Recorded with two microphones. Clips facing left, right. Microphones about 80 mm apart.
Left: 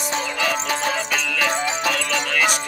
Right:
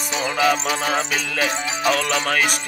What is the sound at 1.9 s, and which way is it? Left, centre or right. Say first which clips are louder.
Music: right 3 dB; right.